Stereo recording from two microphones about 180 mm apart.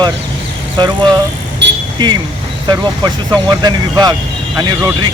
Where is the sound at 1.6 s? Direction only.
75° right (ahead or behind).